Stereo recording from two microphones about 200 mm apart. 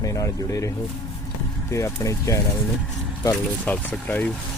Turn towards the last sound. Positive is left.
turn(degrees=10)  # may be behind; listen again after turning